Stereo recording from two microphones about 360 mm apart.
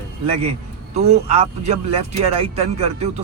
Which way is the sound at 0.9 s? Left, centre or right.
Centre.